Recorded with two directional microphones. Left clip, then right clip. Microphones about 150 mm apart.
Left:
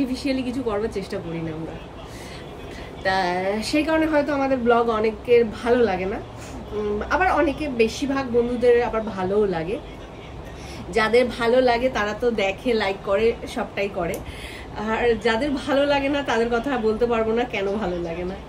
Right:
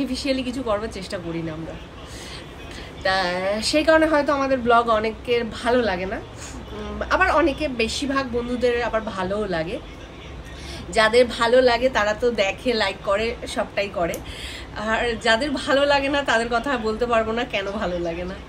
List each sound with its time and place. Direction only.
0.0 s a woman's voice: 25° left (ahead or behind)
3.0 s a woman's voice: 25° left (ahead or behind)
10.9 s a woman's voice: 20° left (ahead or behind)